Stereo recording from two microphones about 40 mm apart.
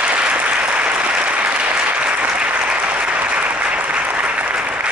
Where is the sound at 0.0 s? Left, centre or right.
Right.